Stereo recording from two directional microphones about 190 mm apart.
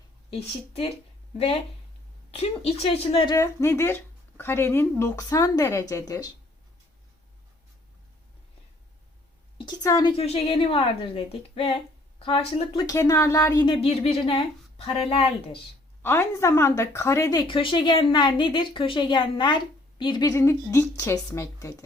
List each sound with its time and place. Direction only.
0.3 s a woman's voice: 30° left (ahead or behind)
2.3 s a woman's voice: 35° left (ahead or behind)
9.6 s speech: 20° left (ahead or behind)
12.8 s speech: 20° left (ahead or behind)
16.0 s a woman's voice: 15° left (ahead or behind)